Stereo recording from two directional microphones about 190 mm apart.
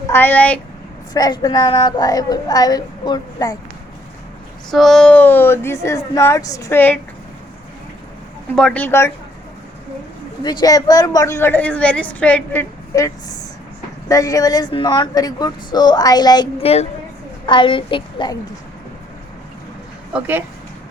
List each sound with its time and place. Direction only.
0.1 s speech: 10° left (ahead or behind)
1.1 s speech: 20° left (ahead or behind)
4.7 s speech: centre (ahead or behind)
8.5 s speech: 5° left (ahead or behind)
10.4 s speech: 20° left (ahead or behind)
12.9 s speech: 20° left (ahead or behind)
20.1 s speech: 10° right (ahead or behind)